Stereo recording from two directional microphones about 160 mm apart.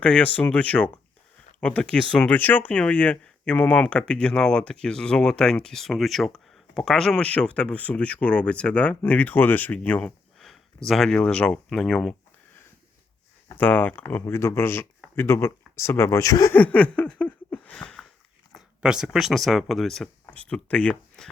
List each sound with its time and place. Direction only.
0.0 s speech: 10° left (ahead or behind)
13.5 s speech: 10° left (ahead or behind)
16.6 s a sound: 10° left (ahead or behind)
18.5 s speech: 5° right (ahead or behind)